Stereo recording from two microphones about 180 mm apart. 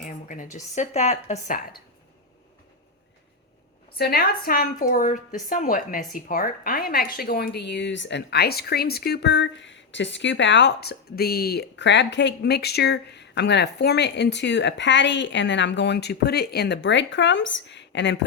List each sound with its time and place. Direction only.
0.0 s a sound: 45° left (ahead or behind)
0.5 s a woman's voice: 40° left (ahead or behind)
3.9 s a woman's voice: 60° left (ahead or behind); by 18.3 s 75° left (ahead or behind)